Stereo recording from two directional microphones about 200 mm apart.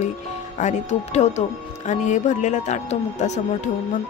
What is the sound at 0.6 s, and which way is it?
Speech, 35° left (ahead or behind).